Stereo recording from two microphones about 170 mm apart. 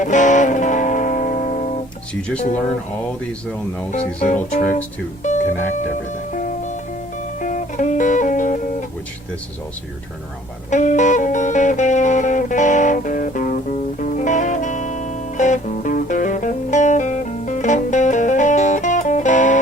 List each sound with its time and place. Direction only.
0.0 s music: 45° left (ahead or behind)
3.9 s speech: 45° left (ahead or behind)
7.4 s music: 45° left (ahead or behind)
10.7 s music: 45° left (ahead or behind)